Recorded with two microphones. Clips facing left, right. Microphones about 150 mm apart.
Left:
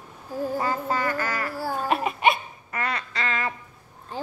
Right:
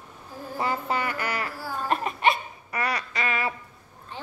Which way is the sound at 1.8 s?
10° left (ahead or behind).